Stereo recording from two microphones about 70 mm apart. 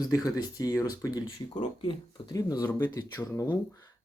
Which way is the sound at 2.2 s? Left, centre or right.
Left.